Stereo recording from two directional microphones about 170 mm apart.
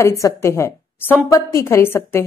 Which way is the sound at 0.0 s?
15° left (ahead or behind).